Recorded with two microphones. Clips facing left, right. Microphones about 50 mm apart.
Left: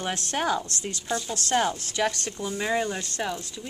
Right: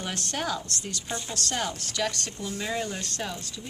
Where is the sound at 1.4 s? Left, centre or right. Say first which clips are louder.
Left 7 dB; left.